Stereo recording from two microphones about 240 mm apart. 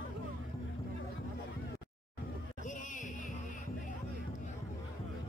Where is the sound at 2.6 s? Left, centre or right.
Left.